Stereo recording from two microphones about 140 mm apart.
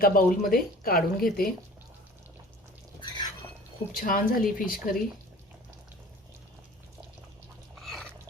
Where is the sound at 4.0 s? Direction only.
75° left (ahead or behind).